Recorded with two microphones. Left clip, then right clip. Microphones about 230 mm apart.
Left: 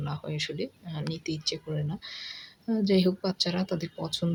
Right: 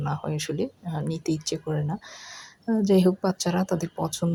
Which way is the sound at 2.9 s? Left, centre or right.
Centre.